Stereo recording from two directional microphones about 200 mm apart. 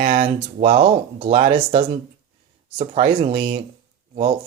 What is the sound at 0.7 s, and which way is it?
Speech, 30° right (ahead or behind).